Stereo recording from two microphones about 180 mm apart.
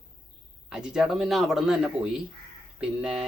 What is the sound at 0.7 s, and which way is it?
Speech, 5° right (ahead or behind).